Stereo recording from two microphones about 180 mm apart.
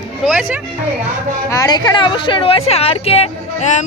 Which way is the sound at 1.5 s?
20° left (ahead or behind).